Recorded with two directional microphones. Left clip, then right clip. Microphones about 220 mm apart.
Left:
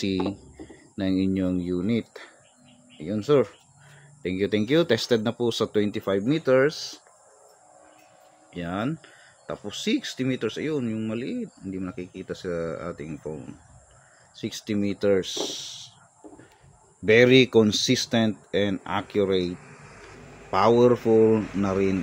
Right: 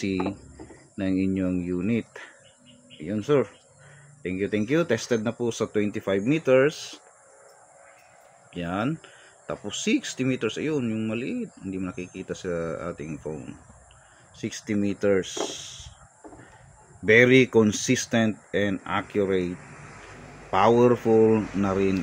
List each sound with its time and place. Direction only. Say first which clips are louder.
0.0 s speech: left 1 dB; 15° left (ahead or behind)
3.3 s speech: left 2 dB; 15° left (ahead or behind)
8.5 s speech: right 1 dB; centre (ahead or behind)
14.4 s speech: even; 10° left (ahead or behind)
17.0 s speech: even; 10° left (ahead or behind)
20.5 s speech: even; 5° left (ahead or behind)